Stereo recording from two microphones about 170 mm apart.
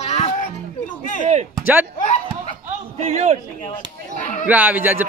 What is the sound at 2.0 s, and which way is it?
Speech, 45° left (ahead or behind).